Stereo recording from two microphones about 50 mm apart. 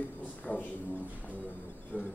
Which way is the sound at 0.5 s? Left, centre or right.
Left.